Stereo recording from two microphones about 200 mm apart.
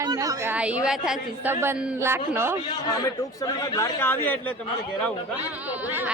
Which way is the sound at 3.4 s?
15° left (ahead or behind).